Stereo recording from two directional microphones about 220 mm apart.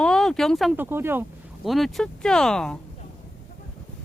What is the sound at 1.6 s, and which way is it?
Speech, centre (ahead or behind).